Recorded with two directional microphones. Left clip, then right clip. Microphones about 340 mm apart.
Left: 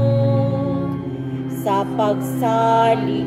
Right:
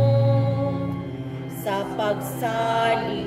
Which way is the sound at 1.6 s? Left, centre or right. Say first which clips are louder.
Left 5 dB; centre.